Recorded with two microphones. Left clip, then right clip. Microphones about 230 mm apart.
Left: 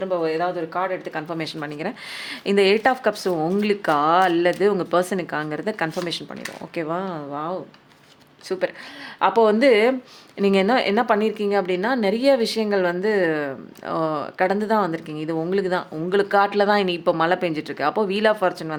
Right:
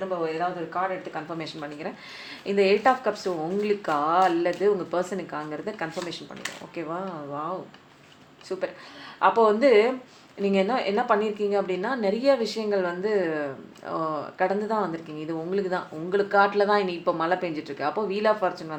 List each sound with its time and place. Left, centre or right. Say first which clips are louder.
0.1 s speech: left 6 dB; left
8.5 s a woman's voice: left 6 dB; left